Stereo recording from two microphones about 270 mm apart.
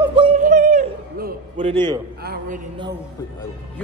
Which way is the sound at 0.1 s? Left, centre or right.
Right.